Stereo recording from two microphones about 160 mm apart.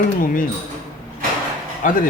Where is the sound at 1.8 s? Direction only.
55° left (ahead or behind).